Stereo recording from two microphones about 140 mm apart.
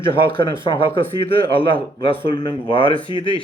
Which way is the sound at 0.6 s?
40° left (ahead or behind).